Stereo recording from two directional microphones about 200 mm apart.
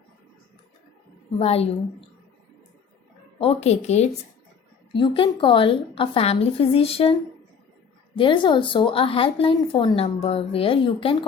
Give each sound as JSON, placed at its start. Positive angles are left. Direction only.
{"t": 1.4, "sound": "speech", "side_deg": 30}
{"t": 3.3, "sound": "a woman's voice", "side_deg": 30}